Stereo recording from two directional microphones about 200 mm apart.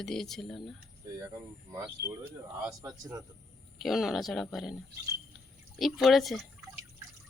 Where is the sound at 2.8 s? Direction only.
15° right (ahead or behind).